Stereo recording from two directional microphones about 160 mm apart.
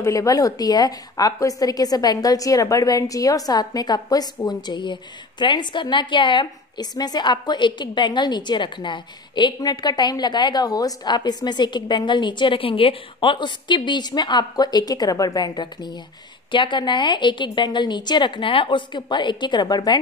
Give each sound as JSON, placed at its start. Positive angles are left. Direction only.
{"t": 0.0, "sound": "a woman's voice", "side_deg": 20}